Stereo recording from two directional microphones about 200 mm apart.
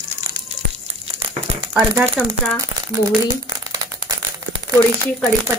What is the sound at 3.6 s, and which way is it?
Crumpling, 20° right (ahead or behind).